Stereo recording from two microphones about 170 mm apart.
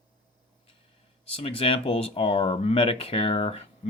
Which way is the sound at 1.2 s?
35° left (ahead or behind).